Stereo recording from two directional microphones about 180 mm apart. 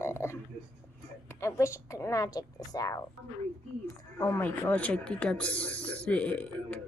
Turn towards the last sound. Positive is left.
turn(degrees=5)  # may be behind; listen again after turning